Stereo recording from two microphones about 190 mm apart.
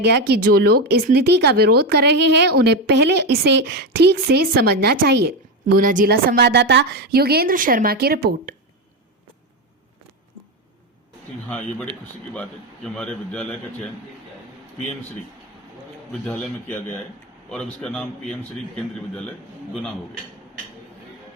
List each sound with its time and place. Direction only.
0.0 s speech: 60° right (ahead or behind)
11.4 s a man's voice: 5° left (ahead or behind)
16.2 s a man's voice: 10° left (ahead or behind)